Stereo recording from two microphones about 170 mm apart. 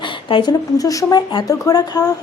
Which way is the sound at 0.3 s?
25° left (ahead or behind).